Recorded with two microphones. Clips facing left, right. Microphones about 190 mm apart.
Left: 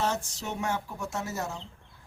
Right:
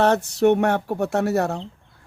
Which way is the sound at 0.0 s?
65° right (ahead or behind).